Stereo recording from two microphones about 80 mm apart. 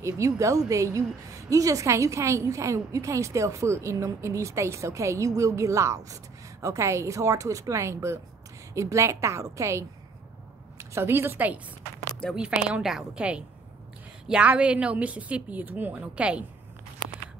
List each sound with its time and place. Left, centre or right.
0.0 s a woman's voice: right; by 16.4 s centre